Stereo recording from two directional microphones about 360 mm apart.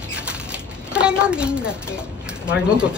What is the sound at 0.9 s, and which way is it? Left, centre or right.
A woman's voice, centre.